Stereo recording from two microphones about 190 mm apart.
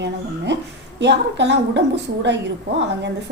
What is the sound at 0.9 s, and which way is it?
Speech, 65° right (ahead or behind).